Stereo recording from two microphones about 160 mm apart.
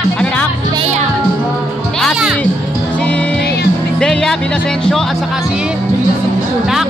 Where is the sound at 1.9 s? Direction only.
Centre (ahead or behind).